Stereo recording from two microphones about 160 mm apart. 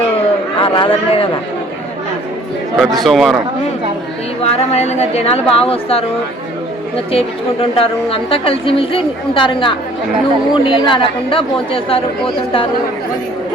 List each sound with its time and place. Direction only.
0.6 s a man's voice: 35° left (ahead or behind)
2.7 s speech: centre (ahead or behind)
4.4 s a woman's voice: 40° left (ahead or behind)
7.1 s a woman's voice: 35° left (ahead or behind)